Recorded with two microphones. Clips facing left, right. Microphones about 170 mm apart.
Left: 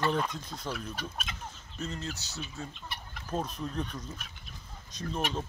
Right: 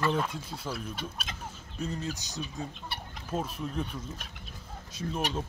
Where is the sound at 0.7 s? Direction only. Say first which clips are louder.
Right 1 dB; 35° right (ahead or behind).